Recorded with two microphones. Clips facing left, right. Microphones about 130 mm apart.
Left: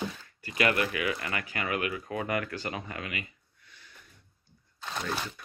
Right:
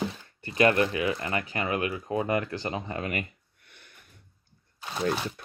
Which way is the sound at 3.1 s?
55° right (ahead or behind).